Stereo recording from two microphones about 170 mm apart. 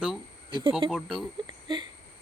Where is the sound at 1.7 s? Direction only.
25° right (ahead or behind).